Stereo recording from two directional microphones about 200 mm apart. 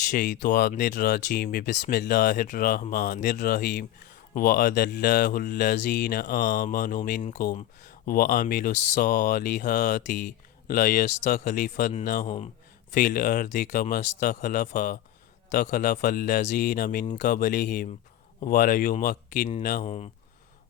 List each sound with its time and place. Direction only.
0.1 s mantra: 45° left (ahead or behind)
0.8 s mantra: 55° left (ahead or behind)
2.3 s mantra: 45° left (ahead or behind)
8.1 s speech: 45° left (ahead or behind)
12.9 s mantra: 45° left (ahead or behind)